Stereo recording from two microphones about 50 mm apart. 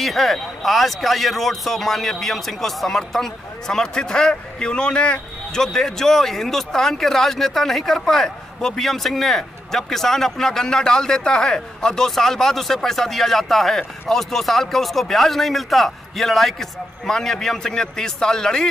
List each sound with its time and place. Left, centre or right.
0.0 s a man's voice: centre